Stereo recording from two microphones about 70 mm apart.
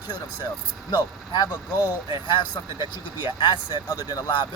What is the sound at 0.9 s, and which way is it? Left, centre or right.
Speech, left.